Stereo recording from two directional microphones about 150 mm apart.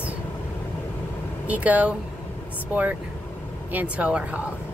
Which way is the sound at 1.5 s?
10° right (ahead or behind).